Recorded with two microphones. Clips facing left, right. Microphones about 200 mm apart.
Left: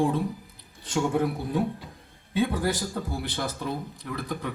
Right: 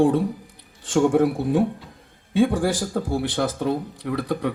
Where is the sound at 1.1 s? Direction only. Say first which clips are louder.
Right 7 dB; 80° right.